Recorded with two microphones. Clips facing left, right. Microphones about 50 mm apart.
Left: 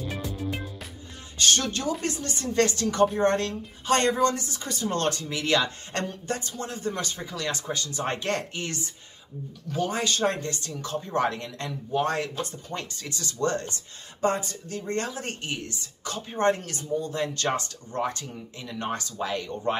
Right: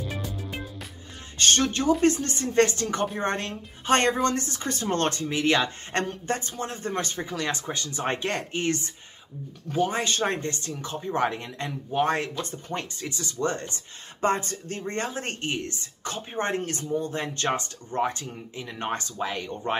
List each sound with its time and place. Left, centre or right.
0.2 s music: centre
1.4 s speech: right
8.6 s speech: right
12.9 s speech: right
14.2 s speech: right
19.2 s speech: right